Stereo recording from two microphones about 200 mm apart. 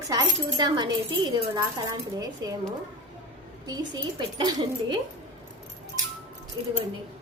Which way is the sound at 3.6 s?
20° right (ahead or behind).